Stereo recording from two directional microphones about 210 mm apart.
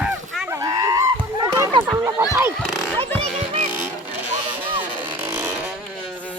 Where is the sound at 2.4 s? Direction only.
5° right (ahead or behind).